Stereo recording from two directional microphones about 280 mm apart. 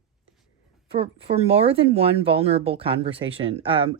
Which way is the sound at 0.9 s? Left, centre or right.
Centre.